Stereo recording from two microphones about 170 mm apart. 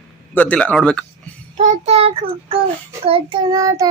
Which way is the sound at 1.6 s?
40° right (ahead or behind).